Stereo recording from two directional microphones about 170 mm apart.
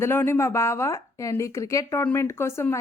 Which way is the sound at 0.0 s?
15° left (ahead or behind).